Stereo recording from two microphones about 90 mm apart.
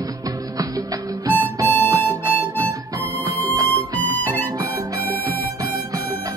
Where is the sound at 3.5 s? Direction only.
35° right (ahead or behind).